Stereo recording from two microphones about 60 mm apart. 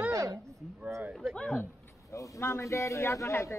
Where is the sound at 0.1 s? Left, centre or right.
Right.